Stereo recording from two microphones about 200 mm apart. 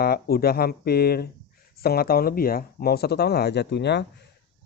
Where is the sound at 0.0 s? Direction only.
50° left (ahead or behind).